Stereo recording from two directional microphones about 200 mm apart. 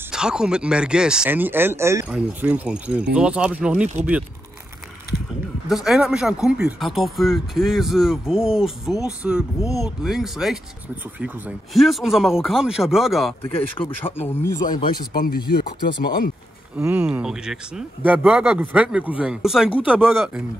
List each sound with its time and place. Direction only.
0.1 s speech: 5° right (ahead or behind)
5.9 s speech: centre (ahead or behind)
13.4 s speech: 25° left (ahead or behind)
14.0 s speech: 10° left (ahead or behind)
15.1 s speech: 50° left (ahead or behind)
16.7 s speech: 5° right (ahead or behind)